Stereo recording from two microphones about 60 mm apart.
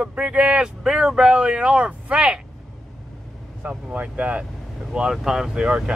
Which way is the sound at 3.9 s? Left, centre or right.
Right.